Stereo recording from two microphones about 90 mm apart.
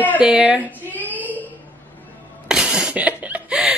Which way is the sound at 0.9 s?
20° left (ahead or behind).